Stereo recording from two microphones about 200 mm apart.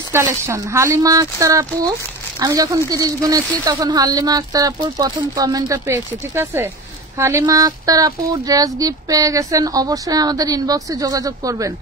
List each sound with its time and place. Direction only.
0.1 s speech: 15° right (ahead or behind)